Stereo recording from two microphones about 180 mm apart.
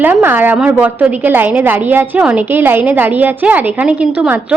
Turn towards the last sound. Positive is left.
turn(degrees=-5)  # may be behind; listen again after turning